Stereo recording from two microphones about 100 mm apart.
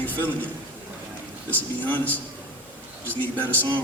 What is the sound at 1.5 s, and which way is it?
Speech, 20° left (ahead or behind).